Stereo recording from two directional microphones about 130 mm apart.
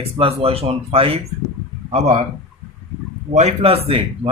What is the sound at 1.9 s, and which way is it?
Speech, 60° right (ahead or behind).